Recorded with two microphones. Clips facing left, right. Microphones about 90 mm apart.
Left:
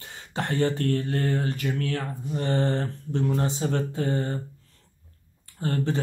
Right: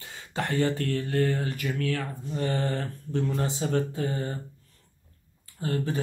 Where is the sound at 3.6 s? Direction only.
45° left (ahead or behind).